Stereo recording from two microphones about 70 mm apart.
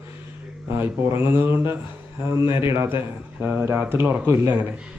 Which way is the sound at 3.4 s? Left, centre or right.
Right.